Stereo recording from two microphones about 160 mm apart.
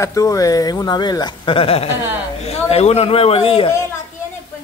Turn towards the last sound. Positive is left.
turn(degrees=35)  # may be behind; listen again after turning